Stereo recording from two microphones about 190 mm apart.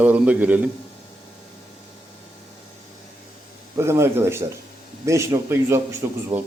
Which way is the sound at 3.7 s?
15° right (ahead or behind).